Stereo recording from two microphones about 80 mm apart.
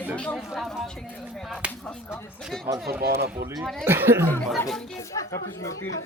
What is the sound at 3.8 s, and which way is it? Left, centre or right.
Speech, right.